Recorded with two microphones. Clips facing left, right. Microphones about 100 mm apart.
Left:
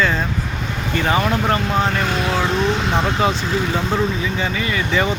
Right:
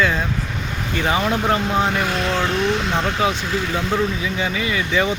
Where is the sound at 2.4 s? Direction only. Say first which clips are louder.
Left 1 dB; 15° left (ahead or behind).